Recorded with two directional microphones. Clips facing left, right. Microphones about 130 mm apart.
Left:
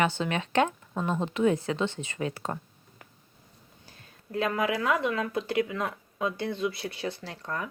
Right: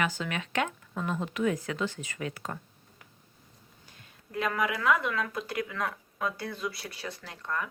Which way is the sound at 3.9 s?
30° left (ahead or behind).